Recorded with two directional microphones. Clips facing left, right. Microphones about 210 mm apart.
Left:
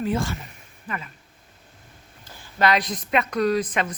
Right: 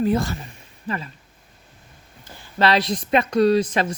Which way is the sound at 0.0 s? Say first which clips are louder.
Right 4 dB; 40° right (ahead or behind).